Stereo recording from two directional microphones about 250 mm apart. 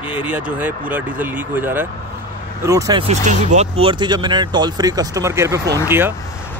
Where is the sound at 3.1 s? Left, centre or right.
Right; by 6.1 s centre.